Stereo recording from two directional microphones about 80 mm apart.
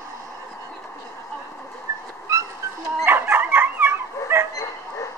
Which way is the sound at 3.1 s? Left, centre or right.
Right.